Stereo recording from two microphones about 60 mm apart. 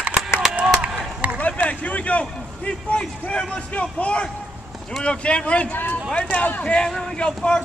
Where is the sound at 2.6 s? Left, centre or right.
Centre.